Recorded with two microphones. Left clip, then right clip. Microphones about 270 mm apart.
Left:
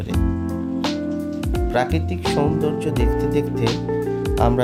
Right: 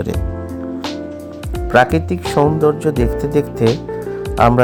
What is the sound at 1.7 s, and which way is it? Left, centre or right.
Speech, centre.